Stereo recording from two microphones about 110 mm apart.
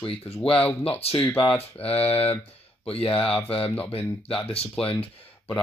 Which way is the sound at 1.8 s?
65° left (ahead or behind).